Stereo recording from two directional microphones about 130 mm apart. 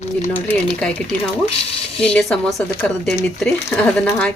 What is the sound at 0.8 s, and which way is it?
Speech, 10° left (ahead or behind).